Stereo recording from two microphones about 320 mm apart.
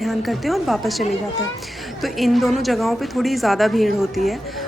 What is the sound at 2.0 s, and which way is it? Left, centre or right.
A woman's voice, centre.